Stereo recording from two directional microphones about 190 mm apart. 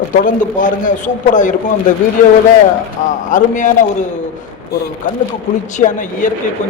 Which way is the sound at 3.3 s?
40° left (ahead or behind).